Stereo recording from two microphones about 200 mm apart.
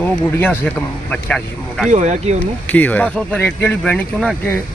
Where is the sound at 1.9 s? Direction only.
35° right (ahead or behind).